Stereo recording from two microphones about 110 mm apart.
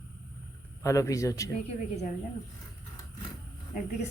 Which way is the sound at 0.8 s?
30° left (ahead or behind).